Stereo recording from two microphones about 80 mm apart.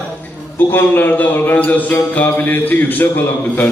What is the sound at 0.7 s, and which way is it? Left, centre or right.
A man's voice, left.